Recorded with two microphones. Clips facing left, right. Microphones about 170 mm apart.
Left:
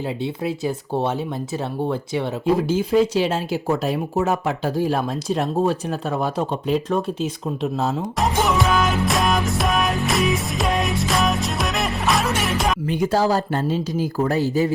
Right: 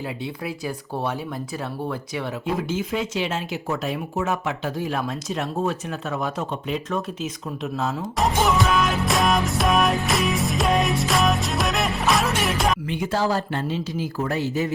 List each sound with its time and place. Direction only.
0.2 s speech: 25° left (ahead or behind)
8.2 s music: centre (ahead or behind)
12.9 s speech: 40° left (ahead or behind)